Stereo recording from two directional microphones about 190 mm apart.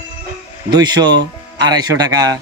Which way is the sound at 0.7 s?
20° right (ahead or behind).